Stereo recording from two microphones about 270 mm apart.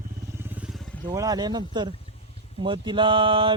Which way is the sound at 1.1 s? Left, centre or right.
Centre.